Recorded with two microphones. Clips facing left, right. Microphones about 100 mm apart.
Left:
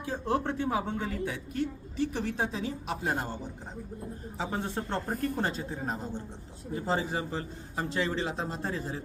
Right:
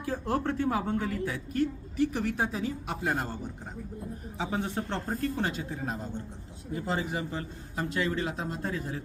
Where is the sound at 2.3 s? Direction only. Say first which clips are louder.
Right 2 dB; 25° left (ahead or behind).